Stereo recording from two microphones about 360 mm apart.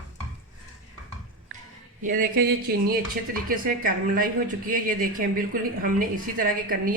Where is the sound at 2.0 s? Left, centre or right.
Right.